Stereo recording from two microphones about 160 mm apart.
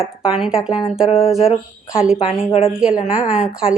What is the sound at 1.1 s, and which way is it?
Speech, 40° left (ahead or behind).